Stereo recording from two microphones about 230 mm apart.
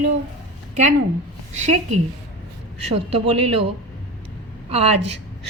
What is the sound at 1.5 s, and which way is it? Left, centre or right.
Speech, right.